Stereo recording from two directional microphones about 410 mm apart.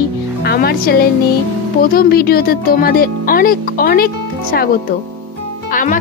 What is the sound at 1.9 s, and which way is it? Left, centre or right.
Speech, left.